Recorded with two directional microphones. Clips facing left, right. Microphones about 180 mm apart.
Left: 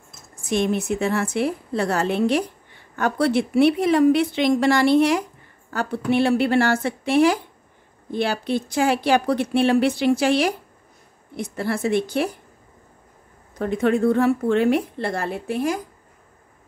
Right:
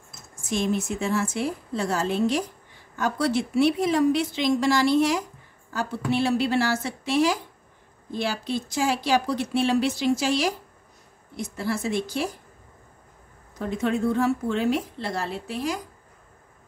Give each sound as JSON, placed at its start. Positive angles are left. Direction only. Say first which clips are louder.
{"t": 0.5, "sound": "speech", "louder": "left 4 dB", "side_deg": 60}
{"t": 13.6, "sound": "speech", "louder": "left 5 dB", "side_deg": 60}